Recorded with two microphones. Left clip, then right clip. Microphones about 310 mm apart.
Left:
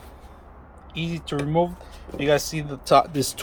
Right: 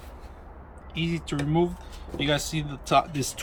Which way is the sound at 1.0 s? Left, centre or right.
Centre.